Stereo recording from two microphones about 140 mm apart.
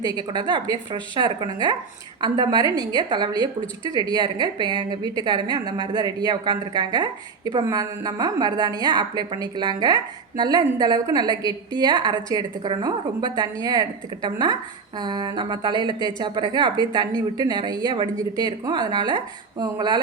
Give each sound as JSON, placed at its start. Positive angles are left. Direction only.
{"t": 0.0, "sound": "a woman's voice", "side_deg": -30}